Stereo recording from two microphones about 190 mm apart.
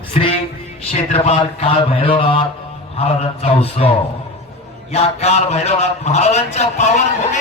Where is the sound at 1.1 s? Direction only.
30° left (ahead or behind).